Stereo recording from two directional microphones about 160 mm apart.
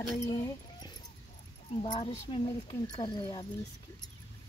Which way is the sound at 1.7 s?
35° left (ahead or behind).